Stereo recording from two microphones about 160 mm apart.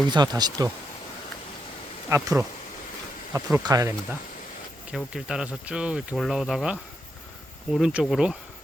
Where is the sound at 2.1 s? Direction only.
20° right (ahead or behind).